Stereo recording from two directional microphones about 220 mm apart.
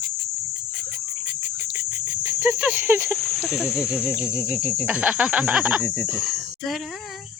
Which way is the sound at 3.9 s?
5° right (ahead or behind).